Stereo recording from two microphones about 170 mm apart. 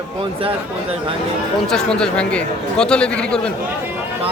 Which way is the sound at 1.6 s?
5° left (ahead or behind).